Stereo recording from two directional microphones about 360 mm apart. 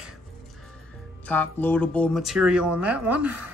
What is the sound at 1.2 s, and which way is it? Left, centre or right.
Speech, centre.